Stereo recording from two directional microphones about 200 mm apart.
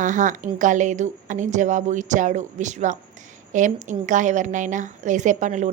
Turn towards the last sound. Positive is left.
turn(degrees=-35)  # may be behind; listen again after turning